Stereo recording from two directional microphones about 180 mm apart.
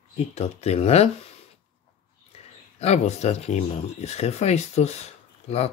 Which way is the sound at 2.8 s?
35° left (ahead or behind).